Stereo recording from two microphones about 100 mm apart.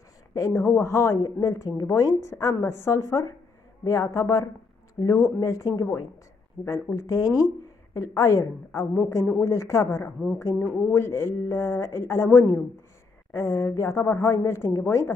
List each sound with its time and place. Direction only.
0.3 s a woman's voice: 30° left (ahead or behind)
8.9 s a man's voice: 20° left (ahead or behind)
9.4 s a woman's voice: 30° left (ahead or behind)